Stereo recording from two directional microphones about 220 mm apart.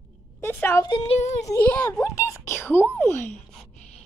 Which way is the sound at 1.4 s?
5° left (ahead or behind).